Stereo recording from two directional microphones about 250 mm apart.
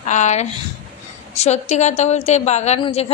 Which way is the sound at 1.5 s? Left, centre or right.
Left.